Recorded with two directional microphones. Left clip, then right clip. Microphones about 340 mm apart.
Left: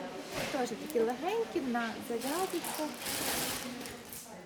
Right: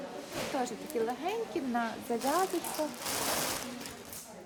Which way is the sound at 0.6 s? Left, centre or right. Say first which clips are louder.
Left 2 dB; centre.